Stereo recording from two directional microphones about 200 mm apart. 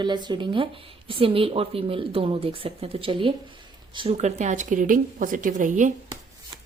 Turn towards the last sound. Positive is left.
turn(degrees=-40)  # may be behind; listen again after turning